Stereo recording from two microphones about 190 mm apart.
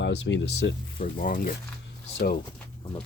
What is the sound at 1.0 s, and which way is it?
Speech, 45° left (ahead or behind).